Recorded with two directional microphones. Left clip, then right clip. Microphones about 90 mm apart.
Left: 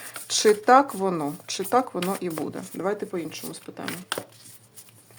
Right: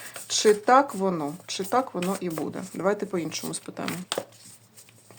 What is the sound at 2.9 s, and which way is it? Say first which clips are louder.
Speech: right 1 dB; 30° right (ahead or behind).